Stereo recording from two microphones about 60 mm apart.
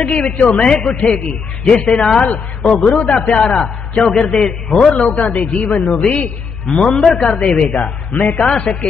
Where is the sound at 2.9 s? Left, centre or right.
Centre.